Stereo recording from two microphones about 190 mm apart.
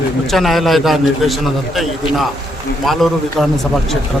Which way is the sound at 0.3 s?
Centre (ahead or behind).